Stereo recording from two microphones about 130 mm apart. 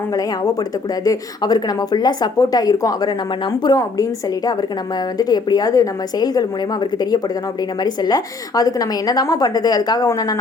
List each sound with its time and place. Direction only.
1.0 s a woman's voice: 30° left (ahead or behind)
5.1 s a woman's voice: 30° left (ahead or behind)
7.9 s a woman's voice: 30° left (ahead or behind)